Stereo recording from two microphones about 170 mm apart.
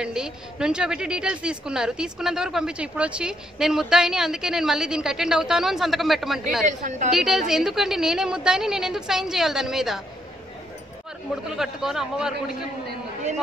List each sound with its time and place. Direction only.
0.0 s a woman's voice: 5° right (ahead or behind)
6.6 s a woman's voice: 45° right (ahead or behind)
7.1 s a woman's voice: centre (ahead or behind)
11.5 s a woman's voice: centre (ahead or behind)